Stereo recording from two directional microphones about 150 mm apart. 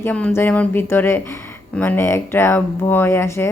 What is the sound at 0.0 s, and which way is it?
A woman's voice, 10° left (ahead or behind).